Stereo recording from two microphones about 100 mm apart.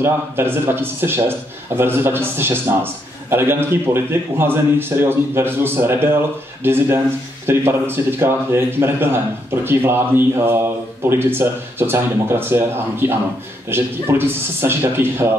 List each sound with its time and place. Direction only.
0.0 s a man's voice: 25° right (ahead or behind)